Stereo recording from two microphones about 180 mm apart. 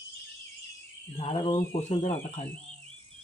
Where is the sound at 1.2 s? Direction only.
30° left (ahead or behind).